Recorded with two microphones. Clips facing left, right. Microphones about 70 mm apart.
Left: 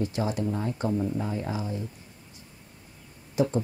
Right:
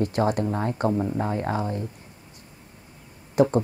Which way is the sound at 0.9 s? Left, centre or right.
Right.